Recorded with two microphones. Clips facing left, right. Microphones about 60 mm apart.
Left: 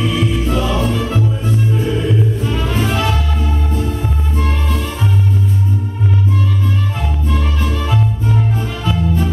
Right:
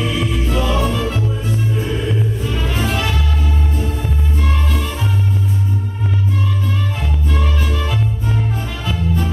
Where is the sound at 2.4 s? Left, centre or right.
Left.